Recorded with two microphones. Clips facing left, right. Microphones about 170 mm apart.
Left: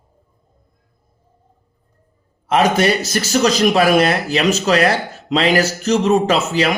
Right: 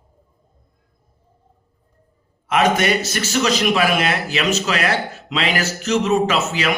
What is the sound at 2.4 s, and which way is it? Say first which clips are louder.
Speech: left 3 dB; 35° left (ahead or behind).